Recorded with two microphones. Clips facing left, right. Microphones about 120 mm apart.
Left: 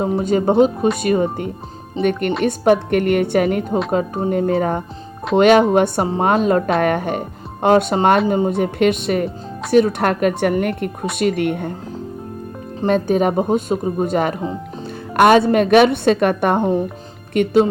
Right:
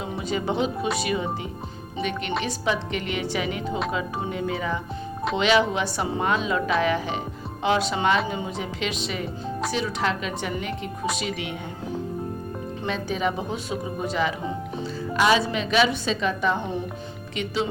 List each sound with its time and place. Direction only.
0.0 s speech: 45° left (ahead or behind)
12.8 s speech: 50° left (ahead or behind)